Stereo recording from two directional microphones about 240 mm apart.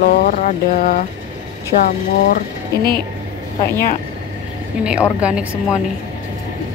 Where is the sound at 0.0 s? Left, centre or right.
Left.